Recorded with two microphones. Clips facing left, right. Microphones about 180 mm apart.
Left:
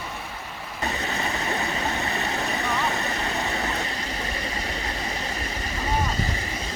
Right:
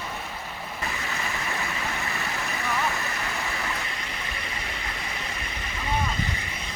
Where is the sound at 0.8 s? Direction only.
35° left (ahead or behind).